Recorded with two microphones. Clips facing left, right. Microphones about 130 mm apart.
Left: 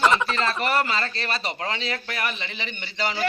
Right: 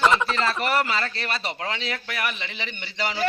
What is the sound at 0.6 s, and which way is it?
A man's voice, 20° left (ahead or behind).